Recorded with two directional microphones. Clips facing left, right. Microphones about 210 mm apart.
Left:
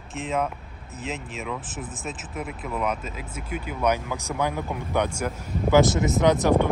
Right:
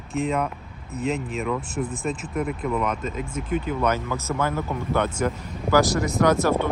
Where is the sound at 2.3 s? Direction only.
55° right (ahead or behind).